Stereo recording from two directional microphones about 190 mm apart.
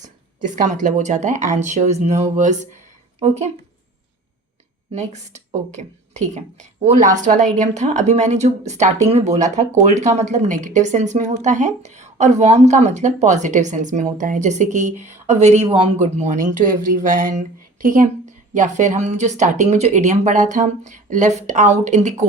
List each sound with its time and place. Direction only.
0.7 s speech: 40° right (ahead or behind)
4.9 s speech: 35° right (ahead or behind)